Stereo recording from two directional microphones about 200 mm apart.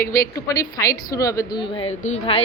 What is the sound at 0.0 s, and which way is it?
A woman's voice, 15° left (ahead or behind).